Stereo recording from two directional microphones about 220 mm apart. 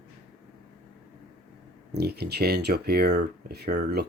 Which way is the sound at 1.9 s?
45° right (ahead or behind).